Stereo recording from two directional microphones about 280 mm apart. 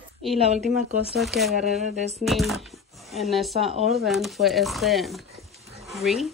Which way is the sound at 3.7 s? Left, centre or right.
Right.